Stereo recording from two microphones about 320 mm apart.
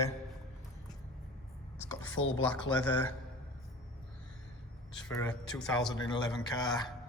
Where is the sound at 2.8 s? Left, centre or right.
Centre.